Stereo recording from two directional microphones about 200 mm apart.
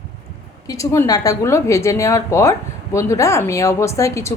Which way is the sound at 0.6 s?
15° left (ahead or behind).